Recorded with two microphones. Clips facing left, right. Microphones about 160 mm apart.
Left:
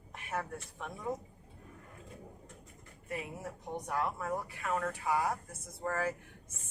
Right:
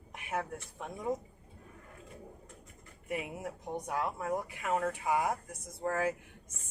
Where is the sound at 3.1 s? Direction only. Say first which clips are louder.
Right 3 dB; 15° right (ahead or behind).